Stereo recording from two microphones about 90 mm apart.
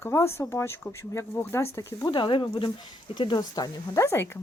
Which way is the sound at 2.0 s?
60° left (ahead or behind).